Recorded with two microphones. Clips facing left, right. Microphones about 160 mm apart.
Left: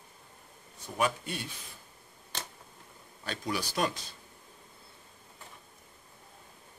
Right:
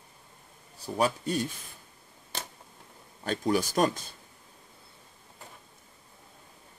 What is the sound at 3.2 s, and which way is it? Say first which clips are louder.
Speech: right 8 dB; 45° right (ahead or behind).